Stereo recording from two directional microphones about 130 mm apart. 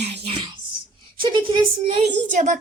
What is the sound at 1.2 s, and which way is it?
Speech, 40° right (ahead or behind).